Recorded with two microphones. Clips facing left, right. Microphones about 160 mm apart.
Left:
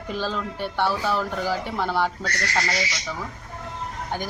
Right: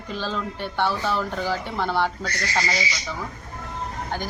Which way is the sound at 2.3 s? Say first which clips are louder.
Left 1 dB; 70° left (ahead or behind).